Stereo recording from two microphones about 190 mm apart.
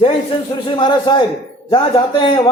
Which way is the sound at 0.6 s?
25° left (ahead or behind).